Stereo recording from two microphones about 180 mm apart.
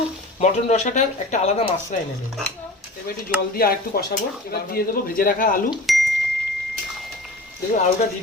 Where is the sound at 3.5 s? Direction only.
55° left (ahead or behind).